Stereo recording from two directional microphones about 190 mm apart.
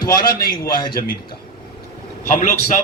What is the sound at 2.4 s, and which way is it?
Speech, 40° left (ahead or behind).